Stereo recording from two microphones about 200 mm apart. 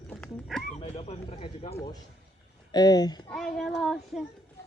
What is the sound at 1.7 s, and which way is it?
Speech, 20° left (ahead or behind).